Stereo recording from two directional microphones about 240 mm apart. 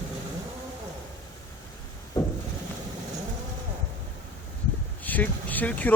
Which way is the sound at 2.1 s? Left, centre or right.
Centre.